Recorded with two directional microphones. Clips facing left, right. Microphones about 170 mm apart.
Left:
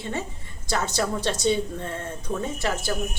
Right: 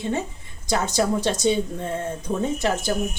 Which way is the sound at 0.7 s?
15° right (ahead or behind).